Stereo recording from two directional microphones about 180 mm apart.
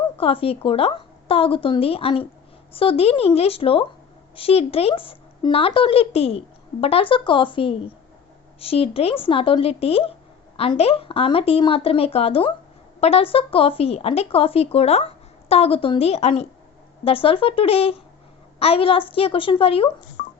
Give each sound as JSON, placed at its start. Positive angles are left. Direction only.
{"t": 0.2, "sound": "speech", "side_deg": 30}
{"t": 20.2, "sound": "music", "side_deg": 60}